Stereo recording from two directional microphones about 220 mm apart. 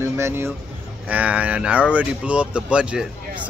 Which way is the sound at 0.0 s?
10° right (ahead or behind).